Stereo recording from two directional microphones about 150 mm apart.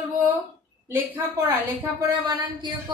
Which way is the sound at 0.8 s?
15° right (ahead or behind).